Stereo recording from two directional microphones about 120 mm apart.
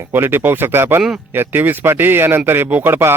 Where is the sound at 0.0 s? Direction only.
20° right (ahead or behind).